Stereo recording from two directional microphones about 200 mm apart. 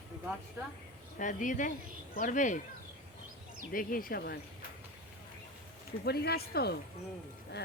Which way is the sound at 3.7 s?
45° left (ahead or behind).